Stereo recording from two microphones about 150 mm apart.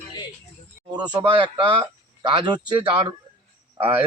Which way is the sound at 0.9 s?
30° right (ahead or behind).